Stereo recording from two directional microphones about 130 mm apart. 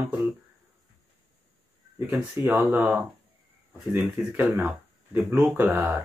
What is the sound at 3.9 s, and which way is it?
Speech, 20° right (ahead or behind).